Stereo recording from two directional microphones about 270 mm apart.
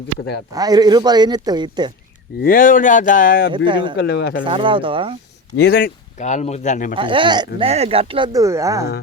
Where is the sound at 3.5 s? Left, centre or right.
Centre.